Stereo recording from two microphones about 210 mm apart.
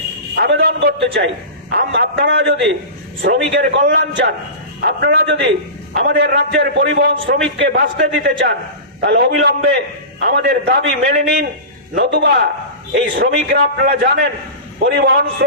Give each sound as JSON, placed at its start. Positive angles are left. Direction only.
{"t": 0.4, "sound": "a man's voice", "side_deg": -50}